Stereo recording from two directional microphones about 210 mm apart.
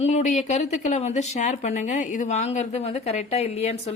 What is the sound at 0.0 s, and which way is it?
A woman's voice, 35° left (ahead or behind).